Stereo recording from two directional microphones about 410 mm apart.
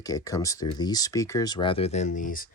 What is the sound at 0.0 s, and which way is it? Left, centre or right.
Speech, centre.